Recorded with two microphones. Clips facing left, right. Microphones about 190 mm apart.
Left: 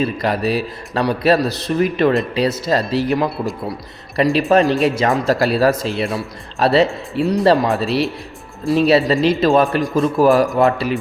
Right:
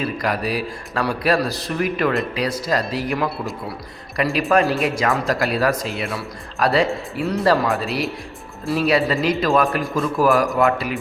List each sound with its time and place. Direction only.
0.0 s a man's voice: 25° left (ahead or behind)
4.4 s speech: 20° left (ahead or behind)
4.8 s a man's voice: 30° left (ahead or behind)
7.3 s speech: 15° left (ahead or behind)
7.5 s a man's voice: 30° left (ahead or behind)